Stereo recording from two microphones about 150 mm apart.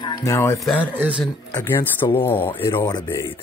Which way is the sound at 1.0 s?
10° right (ahead or behind).